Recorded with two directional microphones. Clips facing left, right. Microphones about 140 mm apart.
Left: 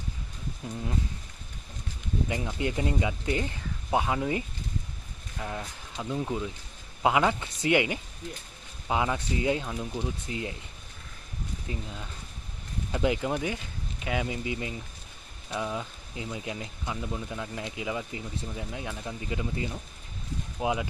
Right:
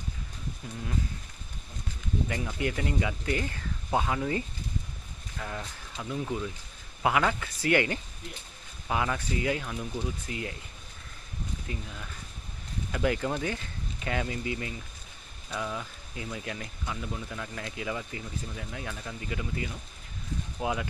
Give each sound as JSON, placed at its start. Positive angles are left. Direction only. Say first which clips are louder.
{"t": 2.3, "sound": "speech", "louder": "left 3 dB", "side_deg": 20}
{"t": 11.7, "sound": "speech", "louder": "left 2 dB", "side_deg": 25}